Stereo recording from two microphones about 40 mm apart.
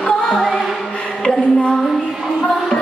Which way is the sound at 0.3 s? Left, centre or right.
Centre.